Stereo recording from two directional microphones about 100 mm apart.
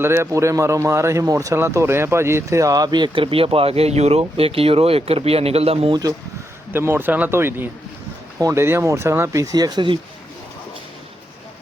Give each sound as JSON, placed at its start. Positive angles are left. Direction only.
{"t": 0.0, "sound": "speech", "side_deg": -25}
{"t": 3.2, "sound": "speech", "side_deg": -70}
{"t": 5.9, "sound": "speech", "side_deg": -40}
{"t": 6.7, "sound": "speech", "side_deg": -25}
{"t": 8.4, "sound": "speech", "side_deg": -35}
{"t": 8.6, "sound": "speech", "side_deg": -25}